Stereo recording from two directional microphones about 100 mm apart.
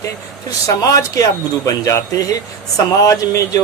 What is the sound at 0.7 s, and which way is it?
Speech, 35° left (ahead or behind).